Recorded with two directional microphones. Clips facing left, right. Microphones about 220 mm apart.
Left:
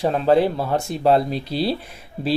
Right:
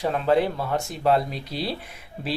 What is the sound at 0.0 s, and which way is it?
Speech, 35° left (ahead or behind).